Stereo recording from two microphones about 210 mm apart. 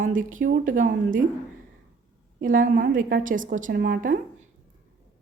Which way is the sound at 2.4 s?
40° right (ahead or behind).